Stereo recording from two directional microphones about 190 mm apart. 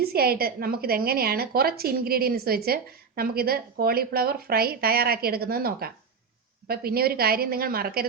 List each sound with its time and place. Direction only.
0.0 s a woman's voice: 55° right (ahead or behind)